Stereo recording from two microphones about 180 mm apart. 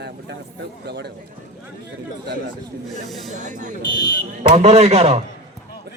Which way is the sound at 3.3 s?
45° right (ahead or behind).